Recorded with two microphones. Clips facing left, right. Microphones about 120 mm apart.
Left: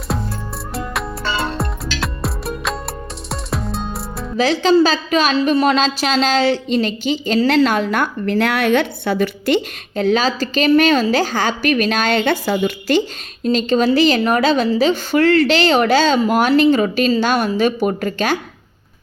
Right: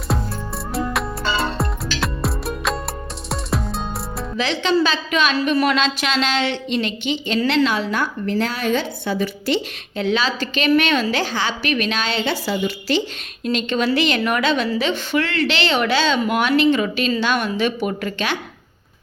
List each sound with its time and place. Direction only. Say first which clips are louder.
0.1 s music: even; centre (ahead or behind)
4.4 s a woman's voice: left 6 dB; 40° left (ahead or behind); by 9.6 s 65° left (ahead or behind)
9.9 s a woman's voice: left 4 dB; 40° left (ahead or behind)
13.4 s a woman's voice: left 5 dB; 35° left (ahead or behind)